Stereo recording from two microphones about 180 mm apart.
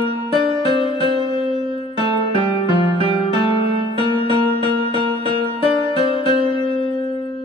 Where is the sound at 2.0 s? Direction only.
30° left (ahead or behind).